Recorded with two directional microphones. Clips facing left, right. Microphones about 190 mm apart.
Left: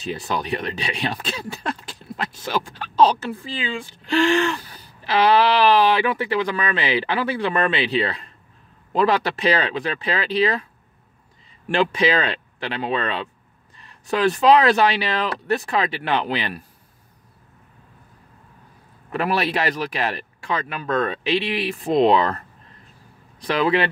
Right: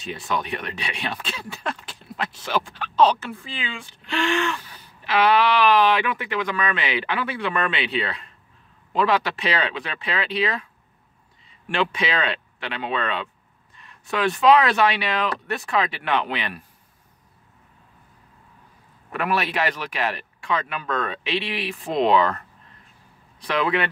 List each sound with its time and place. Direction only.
0.0 s speech: 35° left (ahead or behind)
11.7 s speech: 35° left (ahead or behind)
19.1 s speech: 35° left (ahead or behind)
23.4 s speech: 35° left (ahead or behind)